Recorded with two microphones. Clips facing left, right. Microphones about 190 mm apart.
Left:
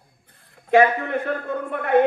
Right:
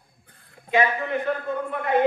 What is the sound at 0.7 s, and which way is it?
A man's voice, 55° left (ahead or behind).